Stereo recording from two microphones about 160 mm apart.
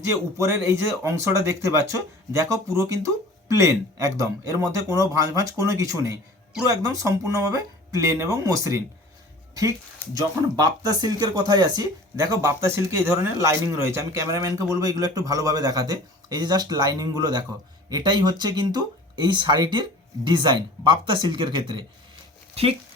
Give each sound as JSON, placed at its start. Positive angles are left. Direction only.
{"t": 0.1, "sound": "speech", "side_deg": -15}
{"t": 10.2, "sound": "speech", "side_deg": -25}